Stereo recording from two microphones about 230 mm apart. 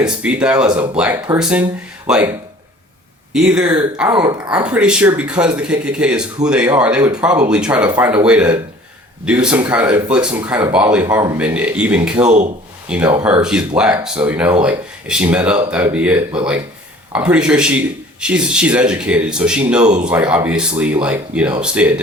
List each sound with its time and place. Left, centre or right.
0.0 s speech: centre
3.3 s speech: centre
4.1 s speech: centre
4.5 s speech: centre